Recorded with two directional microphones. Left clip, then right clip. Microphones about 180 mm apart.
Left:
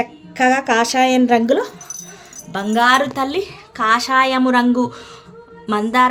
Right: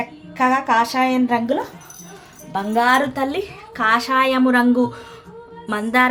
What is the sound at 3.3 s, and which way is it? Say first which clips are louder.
A woman's voice: left 2 dB; 25° left (ahead or behind).